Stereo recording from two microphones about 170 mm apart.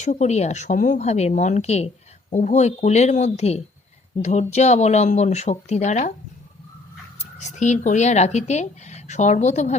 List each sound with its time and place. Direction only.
0.0 s speech: 45° left (ahead or behind)
7.2 s speech: 45° left (ahead or behind)